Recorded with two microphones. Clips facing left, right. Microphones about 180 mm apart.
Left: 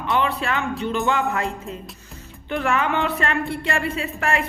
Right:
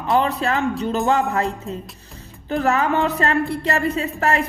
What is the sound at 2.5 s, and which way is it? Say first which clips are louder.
Speech: right 3 dB; 40° right (ahead or behind).